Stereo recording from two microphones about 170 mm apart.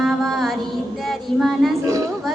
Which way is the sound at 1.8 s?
20° right (ahead or behind).